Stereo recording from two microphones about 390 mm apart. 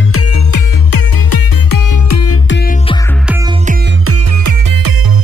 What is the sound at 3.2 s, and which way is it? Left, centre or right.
Music, centre.